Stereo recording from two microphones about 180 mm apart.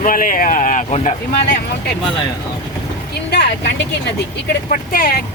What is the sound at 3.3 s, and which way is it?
Speech, 70° left (ahead or behind).